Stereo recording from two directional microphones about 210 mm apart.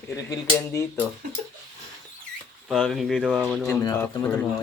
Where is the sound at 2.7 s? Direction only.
Centre (ahead or behind).